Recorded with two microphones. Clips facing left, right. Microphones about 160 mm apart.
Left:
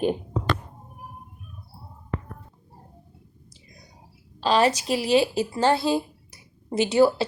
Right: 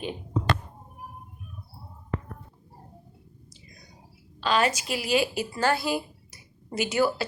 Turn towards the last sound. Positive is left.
turn(degrees=30)  # may be behind; listen again after turning